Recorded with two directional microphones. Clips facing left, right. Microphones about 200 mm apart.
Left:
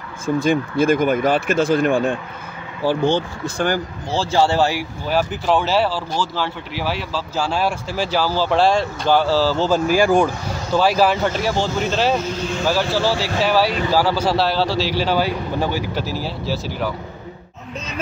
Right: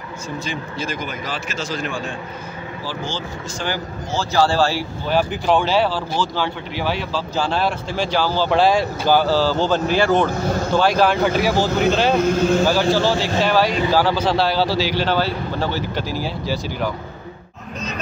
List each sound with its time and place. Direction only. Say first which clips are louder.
0.4 s speech: left 12 dB; 55° left (ahead or behind)
4.1 s a man's voice: left 1 dB; 30° left (ahead or behind)
5.0 s speech: right 1 dB; 5° left (ahead or behind)
10.3 s speech: right 7 dB; 45° right (ahead or behind)
10.7 s speech: left 2 dB; 5° left (ahead or behind)
12.2 s speech: right 8 dB; 50° right (ahead or behind)
12.6 s speech: right 2 dB; centre (ahead or behind)